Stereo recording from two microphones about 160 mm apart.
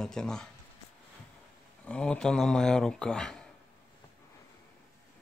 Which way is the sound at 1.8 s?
5° left (ahead or behind).